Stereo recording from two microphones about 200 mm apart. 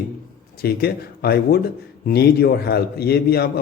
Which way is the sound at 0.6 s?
50° left (ahead or behind).